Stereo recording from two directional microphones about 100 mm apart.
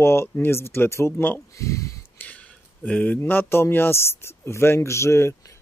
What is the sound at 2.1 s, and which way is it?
Speech, 15° left (ahead or behind).